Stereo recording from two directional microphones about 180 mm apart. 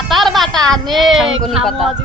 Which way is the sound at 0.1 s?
Centre (ahead or behind).